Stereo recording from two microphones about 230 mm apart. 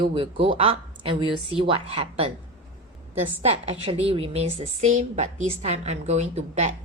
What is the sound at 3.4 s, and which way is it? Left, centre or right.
A woman's voice, right.